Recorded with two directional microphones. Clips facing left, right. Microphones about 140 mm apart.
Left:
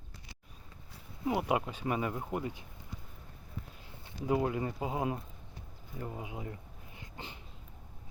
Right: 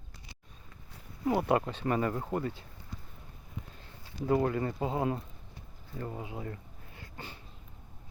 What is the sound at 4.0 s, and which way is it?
Speech, 10° left (ahead or behind).